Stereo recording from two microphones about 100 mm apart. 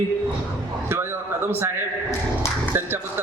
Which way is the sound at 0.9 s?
25° right (ahead or behind).